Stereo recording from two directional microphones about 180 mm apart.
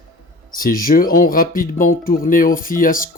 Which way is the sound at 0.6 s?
55° left (ahead or behind).